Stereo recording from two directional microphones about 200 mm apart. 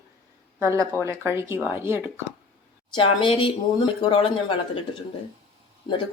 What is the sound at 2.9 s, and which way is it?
Speech, 25° left (ahead or behind).